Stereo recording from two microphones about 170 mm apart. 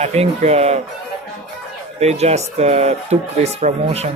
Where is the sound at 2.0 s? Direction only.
40° right (ahead or behind).